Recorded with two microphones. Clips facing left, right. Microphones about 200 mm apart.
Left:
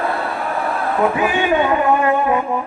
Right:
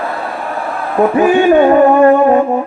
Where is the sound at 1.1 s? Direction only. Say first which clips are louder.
Right 9 dB; 40° right (ahead or behind).